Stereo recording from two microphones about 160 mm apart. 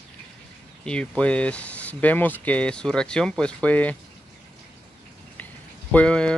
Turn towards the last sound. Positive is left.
turn(degrees=5)  # may be behind; listen again after turning